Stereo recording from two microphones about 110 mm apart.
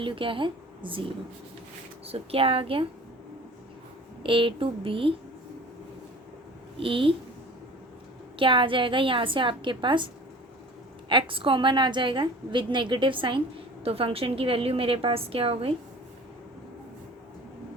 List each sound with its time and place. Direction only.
0.0 s a woman's voice: 50° right (ahead or behind)
4.2 s a woman's voice: 50° right (ahead or behind)
6.7 s a woman's voice: 55° right (ahead or behind)
8.4 s a woman's voice: 50° right (ahead or behind)
11.1 s a woman's voice: 50° right (ahead or behind)
13.8 s a woman's voice: 60° right (ahead or behind)